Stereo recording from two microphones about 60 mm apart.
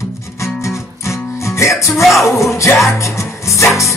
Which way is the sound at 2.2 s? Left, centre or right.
Left.